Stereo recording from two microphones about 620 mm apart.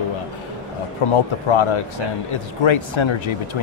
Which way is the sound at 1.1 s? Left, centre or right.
Left.